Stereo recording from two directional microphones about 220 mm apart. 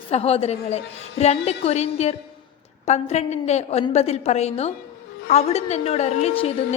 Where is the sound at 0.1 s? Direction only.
25° left (ahead or behind).